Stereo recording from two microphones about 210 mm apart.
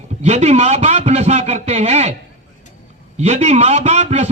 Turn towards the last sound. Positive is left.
turn(degrees=-30)  # may be behind; listen again after turning